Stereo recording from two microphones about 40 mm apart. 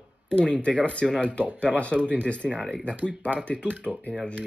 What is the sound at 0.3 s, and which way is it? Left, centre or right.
Speech, left.